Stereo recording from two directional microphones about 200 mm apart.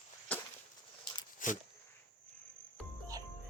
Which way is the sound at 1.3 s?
40° left (ahead or behind).